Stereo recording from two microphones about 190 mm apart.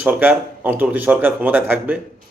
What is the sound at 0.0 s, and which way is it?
Speech, 10° right (ahead or behind).